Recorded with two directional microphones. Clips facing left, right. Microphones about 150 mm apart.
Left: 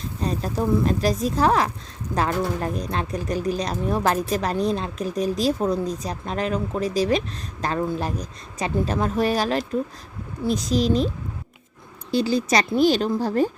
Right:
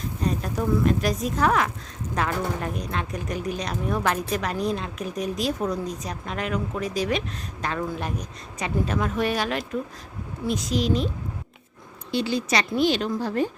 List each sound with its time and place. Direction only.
0.2 s speech: 30° left (ahead or behind)
12.1 s speech: 40° left (ahead or behind)